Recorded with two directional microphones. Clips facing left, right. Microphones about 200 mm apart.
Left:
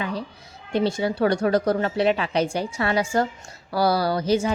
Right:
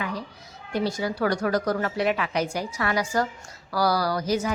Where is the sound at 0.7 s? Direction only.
25° left (ahead or behind).